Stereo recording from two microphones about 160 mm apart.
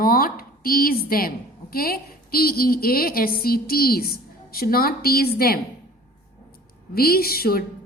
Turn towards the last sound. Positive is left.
turn(degrees=70)  # may be behind; listen again after turning